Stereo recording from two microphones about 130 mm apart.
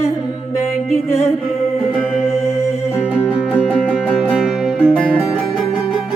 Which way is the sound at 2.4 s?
20° left (ahead or behind).